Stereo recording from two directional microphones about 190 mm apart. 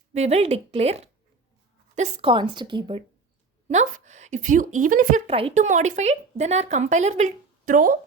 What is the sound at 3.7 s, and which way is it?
Speech, 40° right (ahead or behind).